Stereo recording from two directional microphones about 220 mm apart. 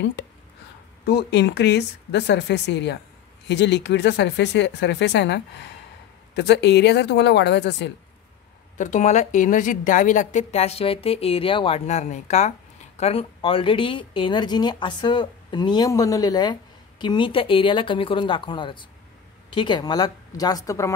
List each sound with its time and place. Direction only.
1.0 s speech: 50° left (ahead or behind)
8.7 s a woman's voice: 35° left (ahead or behind); by 20.9 s 15° left (ahead or behind)